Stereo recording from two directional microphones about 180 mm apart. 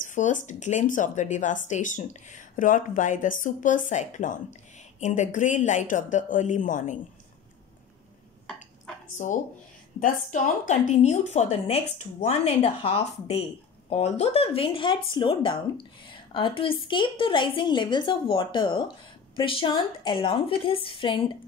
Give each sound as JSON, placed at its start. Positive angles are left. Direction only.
{"t": 0.0, "sound": "a woman's voice", "side_deg": 45}
{"t": 9.2, "sound": "a woman's voice", "side_deg": 45}